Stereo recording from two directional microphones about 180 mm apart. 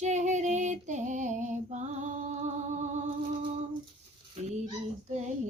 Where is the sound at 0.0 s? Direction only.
40° right (ahead or behind).